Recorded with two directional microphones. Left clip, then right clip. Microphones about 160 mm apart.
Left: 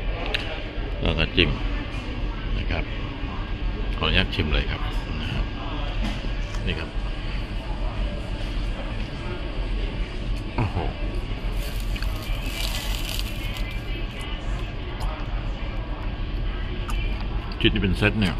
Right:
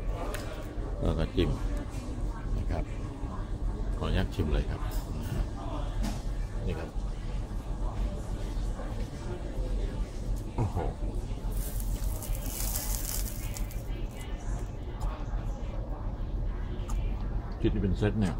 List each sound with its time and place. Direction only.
1.0 s speech: 20° right (ahead or behind)
4.0 s speech: 20° right (ahead or behind)
17.6 s speech: centre (ahead or behind)